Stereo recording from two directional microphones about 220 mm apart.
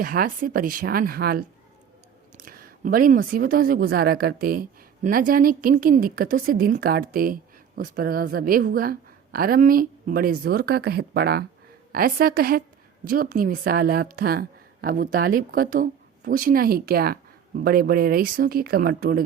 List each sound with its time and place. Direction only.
0.0 s a woman's voice: 40° right (ahead or behind)